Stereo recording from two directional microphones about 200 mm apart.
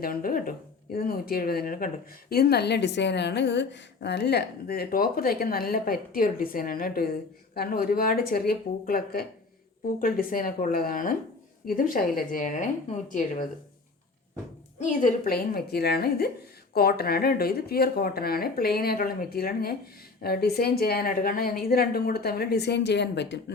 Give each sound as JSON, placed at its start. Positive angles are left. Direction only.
{"t": 0.0, "sound": "a woman's voice", "side_deg": 45}
{"t": 15.0, "sound": "a woman's voice", "side_deg": 45}